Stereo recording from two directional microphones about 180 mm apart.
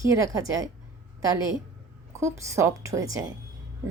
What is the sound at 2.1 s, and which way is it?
A woman's voice, 15° right (ahead or behind).